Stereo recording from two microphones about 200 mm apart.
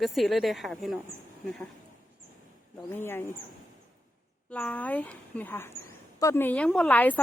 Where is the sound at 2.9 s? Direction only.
10° left (ahead or behind).